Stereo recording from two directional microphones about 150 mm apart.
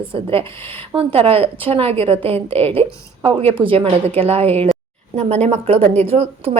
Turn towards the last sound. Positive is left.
turn(degrees=-40)  # may be behind; listen again after turning